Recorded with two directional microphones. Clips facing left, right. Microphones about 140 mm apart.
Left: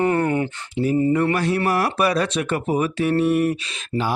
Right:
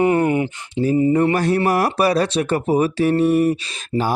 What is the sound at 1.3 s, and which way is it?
Speech, 40° right (ahead or behind).